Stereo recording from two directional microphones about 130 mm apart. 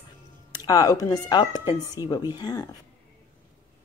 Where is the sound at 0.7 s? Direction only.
30° left (ahead or behind).